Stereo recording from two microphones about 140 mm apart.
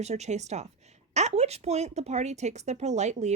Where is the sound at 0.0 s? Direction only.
50° right (ahead or behind).